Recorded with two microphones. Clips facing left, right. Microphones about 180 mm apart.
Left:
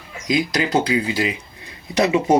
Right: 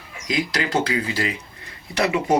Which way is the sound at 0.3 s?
20° left (ahead or behind).